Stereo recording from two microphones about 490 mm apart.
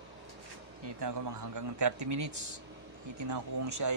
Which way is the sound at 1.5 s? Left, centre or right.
Right.